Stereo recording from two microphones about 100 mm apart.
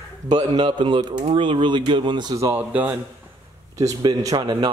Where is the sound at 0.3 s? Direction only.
45° right (ahead or behind).